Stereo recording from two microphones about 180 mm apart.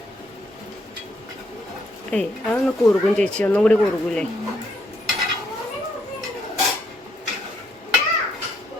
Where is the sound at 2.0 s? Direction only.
5° left (ahead or behind).